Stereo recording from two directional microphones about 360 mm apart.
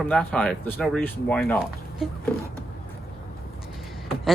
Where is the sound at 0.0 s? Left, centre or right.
Centre.